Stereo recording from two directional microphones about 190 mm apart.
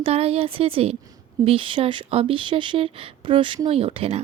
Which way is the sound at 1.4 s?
30° right (ahead or behind).